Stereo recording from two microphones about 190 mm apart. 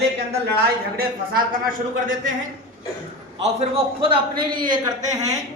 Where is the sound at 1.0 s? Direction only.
50° right (ahead or behind).